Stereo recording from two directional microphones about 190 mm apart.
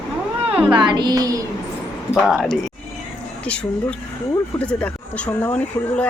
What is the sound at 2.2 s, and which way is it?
Speech, centre (ahead or behind).